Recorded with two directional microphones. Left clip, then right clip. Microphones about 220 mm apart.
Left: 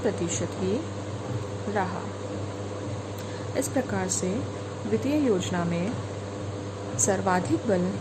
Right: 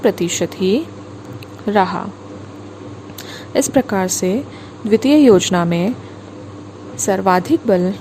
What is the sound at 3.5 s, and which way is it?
A woman's voice, 40° right (ahead or behind).